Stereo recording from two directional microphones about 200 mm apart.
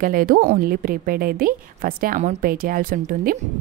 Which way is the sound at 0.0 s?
45° right (ahead or behind).